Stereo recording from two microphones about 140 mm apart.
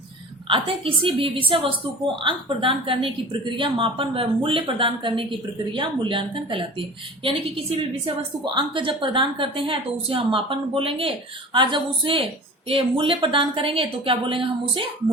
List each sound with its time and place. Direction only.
0.4 s a woman's voice: 40° right (ahead or behind)